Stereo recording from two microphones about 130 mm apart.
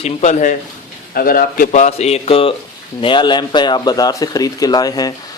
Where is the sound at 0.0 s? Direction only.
65° left (ahead or behind).